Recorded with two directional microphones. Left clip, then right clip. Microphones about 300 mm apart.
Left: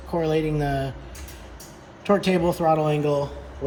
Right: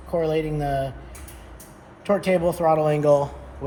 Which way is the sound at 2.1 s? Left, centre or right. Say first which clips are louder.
Even; centre.